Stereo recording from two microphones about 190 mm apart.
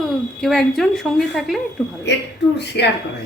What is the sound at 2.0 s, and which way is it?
Speech, 65° left (ahead or behind).